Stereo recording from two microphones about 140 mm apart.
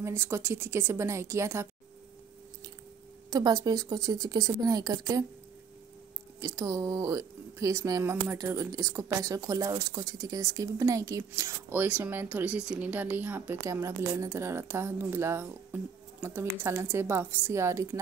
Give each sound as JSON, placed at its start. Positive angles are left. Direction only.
{"t": 0.0, "sound": "a woman's voice", "side_deg": -20}
{"t": 3.3, "sound": "a woman's voice", "side_deg": -25}
{"t": 6.4, "sound": "a woman's voice", "side_deg": -25}